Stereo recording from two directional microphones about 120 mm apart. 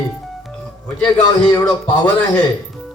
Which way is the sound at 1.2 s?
35° left (ahead or behind).